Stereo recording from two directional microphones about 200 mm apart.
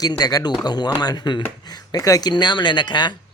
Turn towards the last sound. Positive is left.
turn(degrees=20)  # may be behind; listen again after turning